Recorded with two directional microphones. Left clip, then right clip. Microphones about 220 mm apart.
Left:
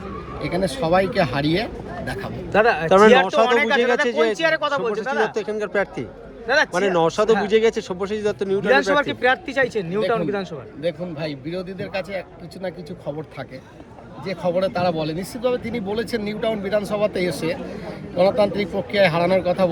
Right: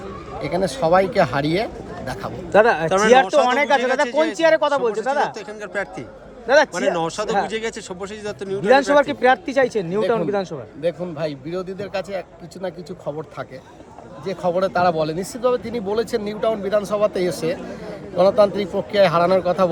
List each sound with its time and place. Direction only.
0.5 s speech: 20° right (ahead or behind)
2.5 s speech: 45° right (ahead or behind)
5.3 s speech: 5° right (ahead or behind)
6.5 s speech: 45° right (ahead or behind)
6.9 s speech: 5° right (ahead or behind)
8.7 s speech: 45° right (ahead or behind)
10.8 s speech: 20° right (ahead or behind)
14.3 s speech: 15° right (ahead or behind)